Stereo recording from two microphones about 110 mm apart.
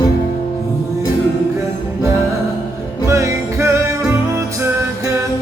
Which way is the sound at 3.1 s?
25° right (ahead or behind).